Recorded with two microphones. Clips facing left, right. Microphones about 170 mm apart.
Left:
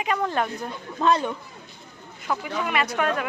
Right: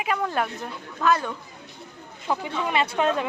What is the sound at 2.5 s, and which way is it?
Speech, 25° right (ahead or behind).